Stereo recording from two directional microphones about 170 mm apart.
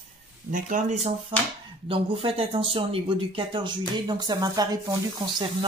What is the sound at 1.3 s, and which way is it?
Speech, 30° right (ahead or behind).